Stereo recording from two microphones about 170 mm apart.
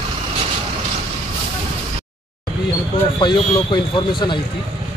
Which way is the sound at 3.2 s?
25° left (ahead or behind).